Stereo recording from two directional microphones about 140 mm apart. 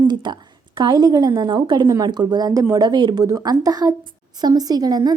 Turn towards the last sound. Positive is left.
turn(degrees=-30)  # may be behind; listen again after turning